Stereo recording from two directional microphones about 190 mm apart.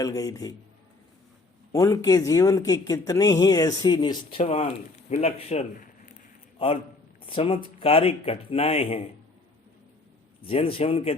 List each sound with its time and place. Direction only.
0.0 s speech: 20° left (ahead or behind)
1.7 s speech: 20° left (ahead or behind)
10.4 s speech: 30° left (ahead or behind)